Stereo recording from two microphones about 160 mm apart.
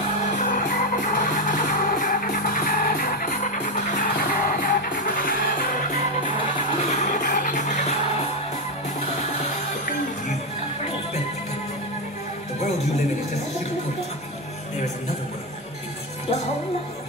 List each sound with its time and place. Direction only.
0.3 s music: 50° left (ahead or behind)
7.0 s music: 50° left (ahead or behind)